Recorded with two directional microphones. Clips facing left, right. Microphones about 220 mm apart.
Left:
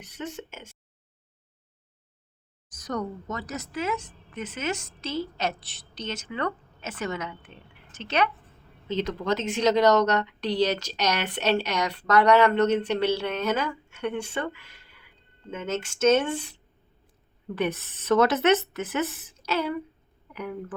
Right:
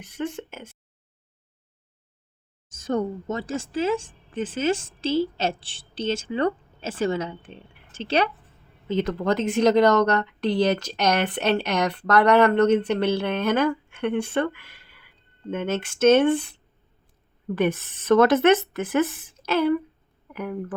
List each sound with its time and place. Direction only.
2.6 s a woman's voice: 25° right (ahead or behind)
8.9 s a woman's voice: 55° right (ahead or behind)